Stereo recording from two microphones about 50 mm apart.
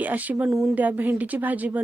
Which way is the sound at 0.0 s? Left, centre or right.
Right.